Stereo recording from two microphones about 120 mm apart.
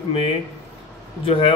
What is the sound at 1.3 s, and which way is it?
Speech, 50° left (ahead or behind).